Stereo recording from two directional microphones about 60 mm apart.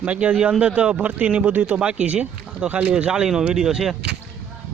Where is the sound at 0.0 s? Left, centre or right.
Right; by 3.9 s centre.